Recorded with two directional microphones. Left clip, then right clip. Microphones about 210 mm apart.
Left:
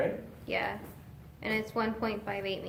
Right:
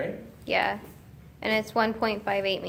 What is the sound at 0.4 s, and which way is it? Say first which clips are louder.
A woman's voice: right 8 dB; 40° right (ahead or behind).